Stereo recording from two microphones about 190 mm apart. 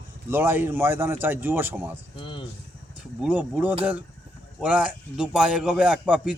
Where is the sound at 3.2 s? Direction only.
5° right (ahead or behind).